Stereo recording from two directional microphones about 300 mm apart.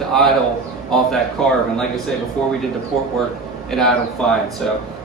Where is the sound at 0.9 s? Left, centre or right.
Centre.